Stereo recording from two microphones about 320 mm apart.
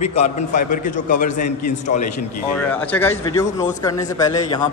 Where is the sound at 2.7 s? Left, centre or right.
Centre.